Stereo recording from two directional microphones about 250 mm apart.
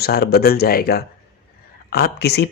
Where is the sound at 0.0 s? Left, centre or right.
Left.